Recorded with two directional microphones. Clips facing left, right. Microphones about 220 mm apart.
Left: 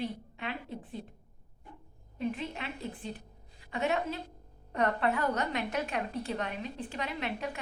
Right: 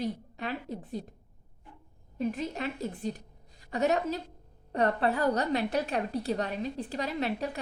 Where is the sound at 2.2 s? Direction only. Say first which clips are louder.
Right 3 dB; 40° right (ahead or behind).